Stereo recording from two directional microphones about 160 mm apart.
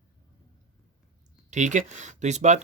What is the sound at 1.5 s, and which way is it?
Speech, 50° right (ahead or behind).